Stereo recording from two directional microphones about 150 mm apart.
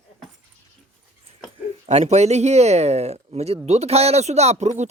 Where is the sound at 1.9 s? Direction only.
45° right (ahead or behind).